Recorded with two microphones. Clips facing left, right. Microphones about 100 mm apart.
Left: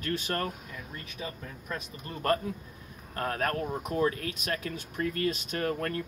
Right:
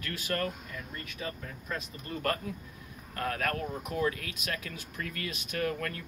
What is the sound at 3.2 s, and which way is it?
Speech, 35° left (ahead or behind).